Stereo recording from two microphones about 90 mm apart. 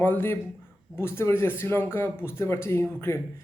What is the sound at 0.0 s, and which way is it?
Speech, 25° left (ahead or behind).